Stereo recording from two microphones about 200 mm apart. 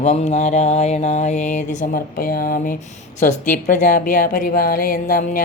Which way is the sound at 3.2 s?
40° left (ahead or behind).